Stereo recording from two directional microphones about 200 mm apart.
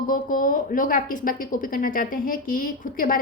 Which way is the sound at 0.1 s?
45° left (ahead or behind).